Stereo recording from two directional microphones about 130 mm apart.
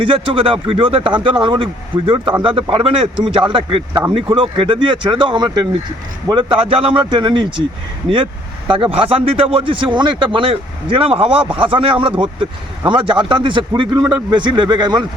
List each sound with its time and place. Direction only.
0.0 s speech: 45° right (ahead or behind)